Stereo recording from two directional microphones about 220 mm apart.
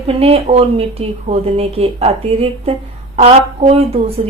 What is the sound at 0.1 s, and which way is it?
Speech, 25° right (ahead or behind).